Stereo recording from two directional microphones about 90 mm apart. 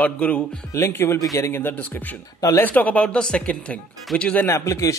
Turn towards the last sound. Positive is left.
turn(degrees=35)  # may be behind; listen again after turning